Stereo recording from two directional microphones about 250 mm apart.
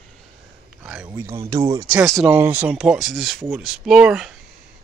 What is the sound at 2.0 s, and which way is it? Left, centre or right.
Speech, centre.